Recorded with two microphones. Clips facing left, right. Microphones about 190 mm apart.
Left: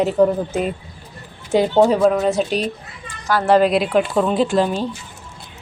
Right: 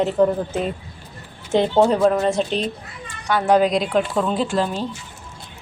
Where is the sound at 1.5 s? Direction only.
5° left (ahead or behind).